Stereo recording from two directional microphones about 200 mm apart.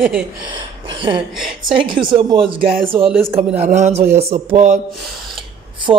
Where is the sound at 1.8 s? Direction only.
25° right (ahead or behind).